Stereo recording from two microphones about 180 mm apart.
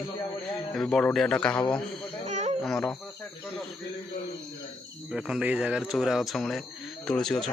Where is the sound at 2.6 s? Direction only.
5° left (ahead or behind).